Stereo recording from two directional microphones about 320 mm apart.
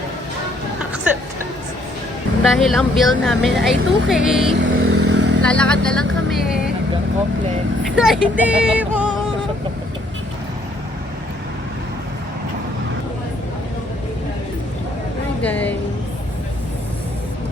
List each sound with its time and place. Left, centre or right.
2.4 s speech: centre
4.8 s vehicle: right
5.4 s speech: centre
7.9 s speech: centre
15.4 s speech: centre